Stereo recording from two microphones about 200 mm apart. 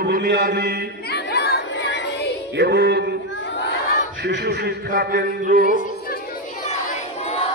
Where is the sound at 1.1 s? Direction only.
55° left (ahead or behind).